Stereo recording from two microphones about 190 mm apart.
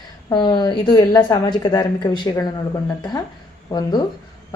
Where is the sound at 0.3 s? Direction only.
25° left (ahead or behind).